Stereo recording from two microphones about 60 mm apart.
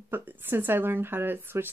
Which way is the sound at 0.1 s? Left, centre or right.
Right.